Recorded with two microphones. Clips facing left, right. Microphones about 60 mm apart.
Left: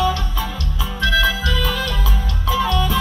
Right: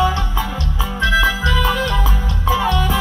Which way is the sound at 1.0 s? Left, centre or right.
Right.